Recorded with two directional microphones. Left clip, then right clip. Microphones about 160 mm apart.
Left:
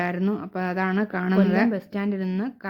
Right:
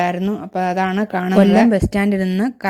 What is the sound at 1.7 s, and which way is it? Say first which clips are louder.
Speech: right 11 dB; 45° right (ahead or behind).